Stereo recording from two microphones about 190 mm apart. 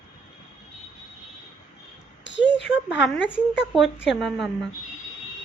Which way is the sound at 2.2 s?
70° left (ahead or behind).